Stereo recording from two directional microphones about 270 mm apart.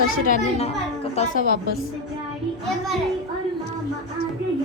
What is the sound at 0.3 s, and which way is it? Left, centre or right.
A woman's voice, left.